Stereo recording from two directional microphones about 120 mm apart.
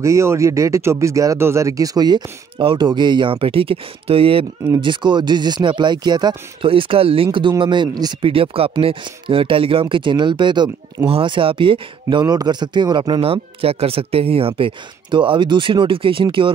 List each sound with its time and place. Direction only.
0.0 s speech: 25° right (ahead or behind); by 4.5 s 50° right (ahead or behind)
4.7 s speech: 40° right (ahead or behind)
13.2 s speech: 55° right (ahead or behind)